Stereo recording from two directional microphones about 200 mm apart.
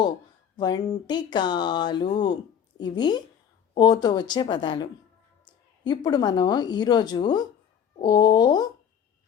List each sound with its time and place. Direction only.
0.5 s a woman's voice: 20° left (ahead or behind)